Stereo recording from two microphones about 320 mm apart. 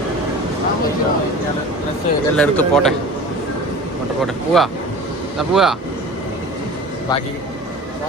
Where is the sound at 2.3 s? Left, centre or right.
Centre.